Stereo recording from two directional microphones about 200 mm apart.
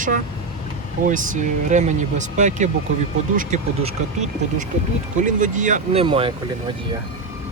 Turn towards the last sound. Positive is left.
turn(degrees=-30)  # may be behind; listen again after turning